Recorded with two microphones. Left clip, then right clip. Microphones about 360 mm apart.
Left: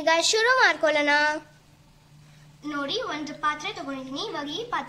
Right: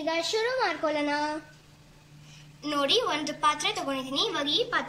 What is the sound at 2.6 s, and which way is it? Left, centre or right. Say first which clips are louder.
A woman's voice: right 4 dB; centre.